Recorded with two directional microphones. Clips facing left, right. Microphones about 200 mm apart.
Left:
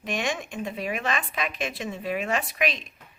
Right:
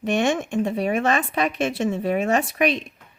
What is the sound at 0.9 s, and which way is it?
A woman's voice, 45° right (ahead or behind).